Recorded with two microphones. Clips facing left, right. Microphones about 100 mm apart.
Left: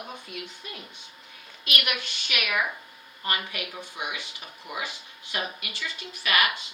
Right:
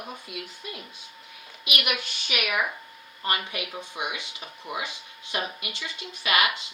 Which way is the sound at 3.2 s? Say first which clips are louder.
Right 2 dB; 20° right (ahead or behind).